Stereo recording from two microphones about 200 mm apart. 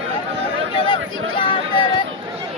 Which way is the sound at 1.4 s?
25° left (ahead or behind).